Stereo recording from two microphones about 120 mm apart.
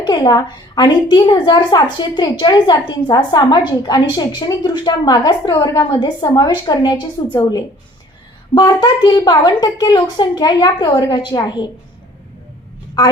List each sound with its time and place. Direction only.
0.0 s a woman's voice: 35° left (ahead or behind)
8.5 s a woman's voice: 35° left (ahead or behind)